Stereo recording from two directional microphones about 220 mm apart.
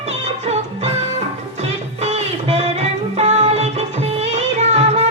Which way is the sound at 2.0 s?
30° right (ahead or behind).